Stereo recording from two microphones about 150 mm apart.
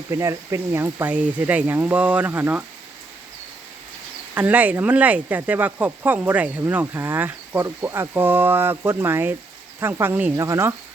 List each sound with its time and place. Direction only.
0.1 s speech: 20° right (ahead or behind)
4.4 s speech: 10° right (ahead or behind)